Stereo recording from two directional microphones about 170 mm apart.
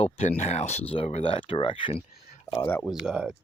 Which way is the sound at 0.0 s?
40° left (ahead or behind).